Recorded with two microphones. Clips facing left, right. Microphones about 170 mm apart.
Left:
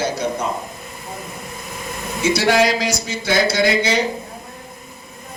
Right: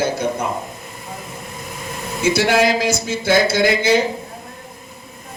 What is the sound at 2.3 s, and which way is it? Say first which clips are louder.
Speech: even; 50° right (ahead or behind).